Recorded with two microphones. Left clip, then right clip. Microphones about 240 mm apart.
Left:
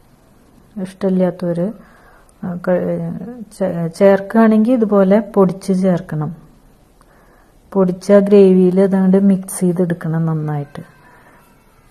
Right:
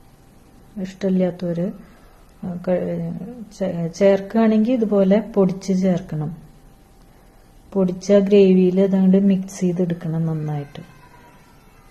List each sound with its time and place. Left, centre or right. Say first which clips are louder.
0.7 s speech: left 4 dB; left
7.7 s speech: left 5 dB; left